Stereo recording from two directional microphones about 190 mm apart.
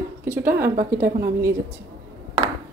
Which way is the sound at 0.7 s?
50° right (ahead or behind).